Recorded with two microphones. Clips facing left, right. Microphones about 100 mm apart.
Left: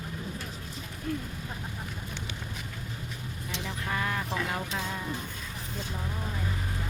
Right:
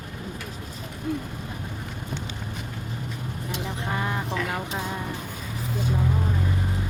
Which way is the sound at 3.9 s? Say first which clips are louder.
Right 2 dB; 25° right (ahead or behind).